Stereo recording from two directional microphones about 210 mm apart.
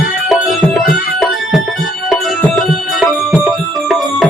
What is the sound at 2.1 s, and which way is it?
Music, centre (ahead or behind).